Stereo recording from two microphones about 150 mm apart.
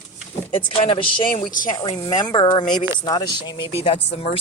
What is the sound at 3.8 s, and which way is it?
Speech, 40° left (ahead or behind).